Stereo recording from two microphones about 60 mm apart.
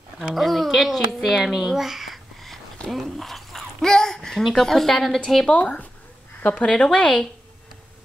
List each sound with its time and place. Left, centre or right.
0.2 s a child's voice: centre
2.9 s dog: centre
4.5 s a woman's voice: centre
5.6 s speech: left